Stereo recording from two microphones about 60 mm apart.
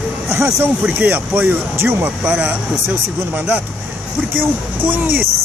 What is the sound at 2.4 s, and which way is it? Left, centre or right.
A man's voice, right.